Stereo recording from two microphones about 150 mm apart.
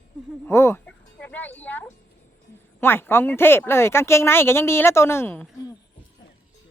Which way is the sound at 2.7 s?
15° left (ahead or behind).